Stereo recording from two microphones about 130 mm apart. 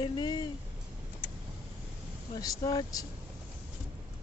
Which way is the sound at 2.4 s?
30° left (ahead or behind).